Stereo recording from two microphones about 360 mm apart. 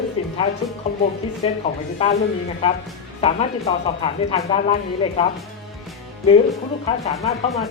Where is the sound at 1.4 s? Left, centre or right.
Centre.